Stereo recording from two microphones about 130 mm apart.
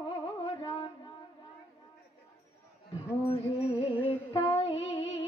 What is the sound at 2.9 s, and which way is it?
Speech, 50° left (ahead or behind).